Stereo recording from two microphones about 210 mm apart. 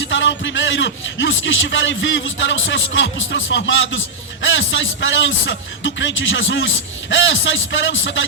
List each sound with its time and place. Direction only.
0.0 s a man's voice: 60° left (ahead or behind)